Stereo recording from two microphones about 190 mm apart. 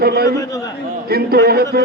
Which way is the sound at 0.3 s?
20° left (ahead or behind).